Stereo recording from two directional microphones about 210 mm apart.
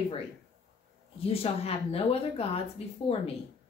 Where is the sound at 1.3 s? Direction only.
30° left (ahead or behind).